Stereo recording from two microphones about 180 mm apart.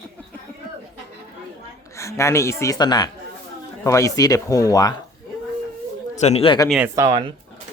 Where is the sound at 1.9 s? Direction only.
15° left (ahead or behind).